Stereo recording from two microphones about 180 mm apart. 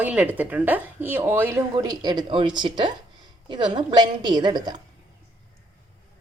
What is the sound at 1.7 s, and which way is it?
A woman's voice, 20° right (ahead or behind).